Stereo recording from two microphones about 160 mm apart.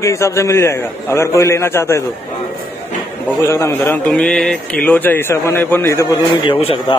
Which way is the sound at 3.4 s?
15° left (ahead or behind).